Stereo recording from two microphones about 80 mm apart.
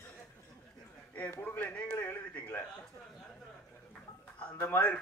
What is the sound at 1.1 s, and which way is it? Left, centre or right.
A man's voice, centre.